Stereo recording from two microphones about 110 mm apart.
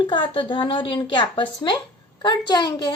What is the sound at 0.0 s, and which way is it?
A woman's voice, 45° left (ahead or behind).